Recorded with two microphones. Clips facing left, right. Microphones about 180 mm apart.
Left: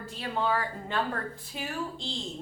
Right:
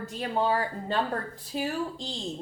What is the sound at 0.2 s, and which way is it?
A woman's voice, 35° right (ahead or behind).